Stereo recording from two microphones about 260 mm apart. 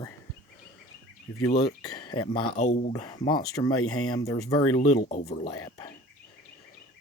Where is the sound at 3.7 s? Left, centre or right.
Left.